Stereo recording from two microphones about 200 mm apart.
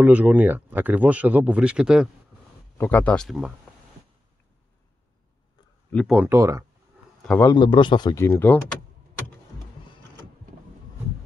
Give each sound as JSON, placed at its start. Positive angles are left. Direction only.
{"t": 0.0, "sound": "speech", "side_deg": -10}
{"t": 2.8, "sound": "speech", "side_deg": 10}
{"t": 5.9, "sound": "speech", "side_deg": 5}
{"t": 6.1, "sound": "speech", "side_deg": -15}
{"t": 7.2, "sound": "speech", "side_deg": 10}
{"t": 7.5, "sound": "speech", "side_deg": 25}